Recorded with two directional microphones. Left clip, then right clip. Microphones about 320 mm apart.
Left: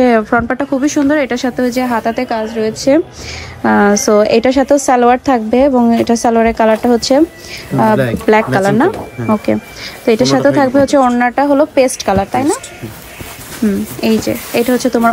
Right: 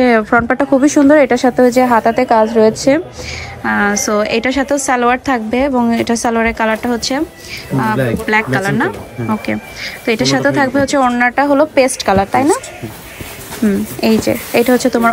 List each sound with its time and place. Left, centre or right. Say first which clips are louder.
0.0 s speech: even; centre
3.6 s a woman's voice: left 4 dB; centre
8.5 s a woman's voice: left 4 dB; centre
13.7 s a woman's voice: right 1 dB; centre